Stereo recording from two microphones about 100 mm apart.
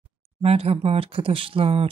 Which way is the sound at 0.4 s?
85° right.